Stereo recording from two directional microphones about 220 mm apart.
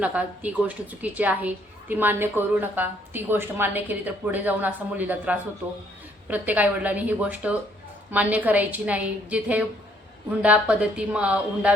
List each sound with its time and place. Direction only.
0.0 s a woman's voice: 5° right (ahead or behind)